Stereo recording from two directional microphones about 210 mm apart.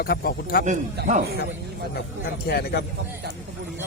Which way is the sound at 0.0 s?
45° left (ahead or behind).